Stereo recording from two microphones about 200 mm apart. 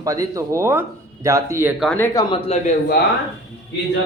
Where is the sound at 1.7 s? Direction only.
Centre (ahead or behind).